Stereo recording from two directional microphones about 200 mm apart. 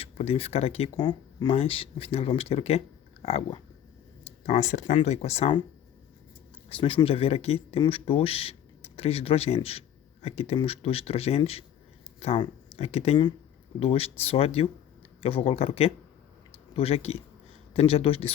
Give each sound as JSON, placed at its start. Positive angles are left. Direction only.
{"t": 0.0, "sound": "speech", "side_deg": 30}
{"t": 6.7, "sound": "speech", "side_deg": 25}